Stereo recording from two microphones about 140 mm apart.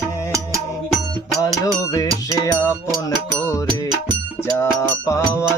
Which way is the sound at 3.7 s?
30° right (ahead or behind).